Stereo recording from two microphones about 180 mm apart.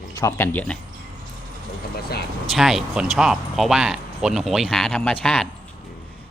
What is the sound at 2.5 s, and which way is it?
Speech, centre (ahead or behind).